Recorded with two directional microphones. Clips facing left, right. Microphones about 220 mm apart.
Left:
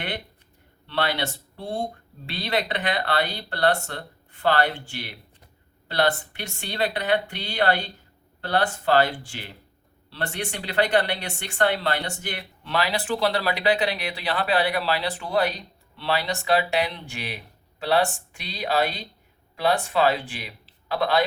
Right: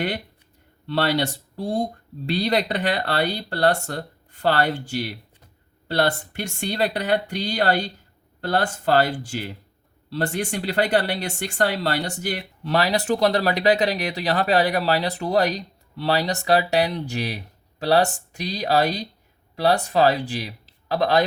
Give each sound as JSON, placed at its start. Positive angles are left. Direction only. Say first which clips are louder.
{"t": 0.9, "sound": "speech", "louder": "right 4 dB", "side_deg": -40}